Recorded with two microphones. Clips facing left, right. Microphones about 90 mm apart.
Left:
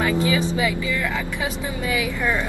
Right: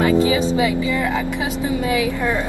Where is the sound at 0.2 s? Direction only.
20° right (ahead or behind).